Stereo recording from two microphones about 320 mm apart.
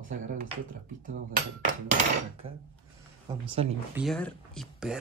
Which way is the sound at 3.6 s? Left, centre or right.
Centre.